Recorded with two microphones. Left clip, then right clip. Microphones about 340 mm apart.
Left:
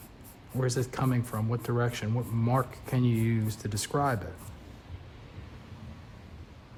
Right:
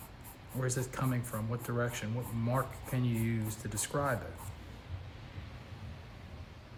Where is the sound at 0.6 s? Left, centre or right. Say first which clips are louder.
Left 6 dB; centre.